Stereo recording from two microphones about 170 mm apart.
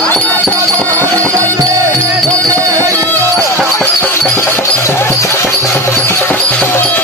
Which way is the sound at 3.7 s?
15° left (ahead or behind).